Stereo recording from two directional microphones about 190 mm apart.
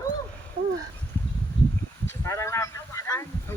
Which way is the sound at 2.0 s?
15° left (ahead or behind).